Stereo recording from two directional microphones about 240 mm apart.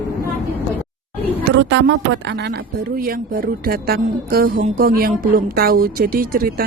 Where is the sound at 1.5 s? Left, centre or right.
Right.